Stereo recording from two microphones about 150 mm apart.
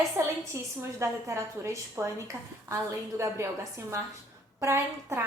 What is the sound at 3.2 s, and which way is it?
A woman's voice, 20° right (ahead or behind).